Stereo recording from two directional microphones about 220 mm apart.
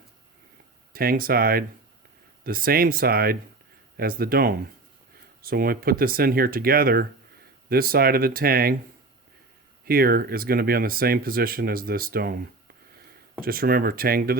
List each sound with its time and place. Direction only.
0.9 s speech: 40° right (ahead or behind)
9.8 s speech: 45° right (ahead or behind)
13.4 s speech: 40° right (ahead or behind)